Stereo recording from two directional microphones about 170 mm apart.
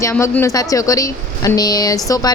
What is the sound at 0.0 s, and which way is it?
Speech, 15° left (ahead or behind).